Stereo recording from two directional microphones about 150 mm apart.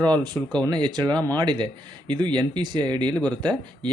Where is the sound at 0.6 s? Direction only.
30° right (ahead or behind).